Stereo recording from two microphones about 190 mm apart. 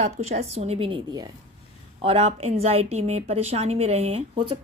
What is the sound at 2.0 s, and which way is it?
A woman's voice, 35° right (ahead or behind).